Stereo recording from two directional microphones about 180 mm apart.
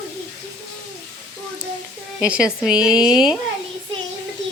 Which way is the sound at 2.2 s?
5° right (ahead or behind).